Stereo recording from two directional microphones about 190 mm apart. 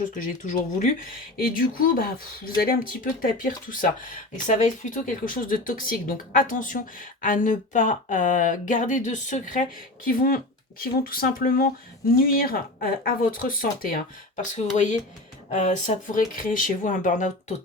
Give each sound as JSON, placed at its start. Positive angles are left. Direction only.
{"t": 0.2, "sound": "speech", "side_deg": 40}
{"t": 15.4, "sound": "speech", "side_deg": 40}